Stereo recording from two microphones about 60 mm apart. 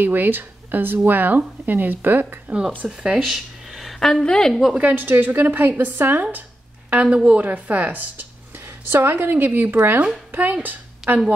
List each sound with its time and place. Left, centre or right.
0.0 s speech: right
3.1 s speech: centre
4.7 s speech: right
6.9 s a woman's voice: right